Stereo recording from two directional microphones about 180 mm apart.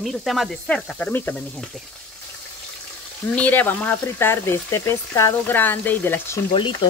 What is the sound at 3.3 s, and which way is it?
Speech, 10° left (ahead or behind).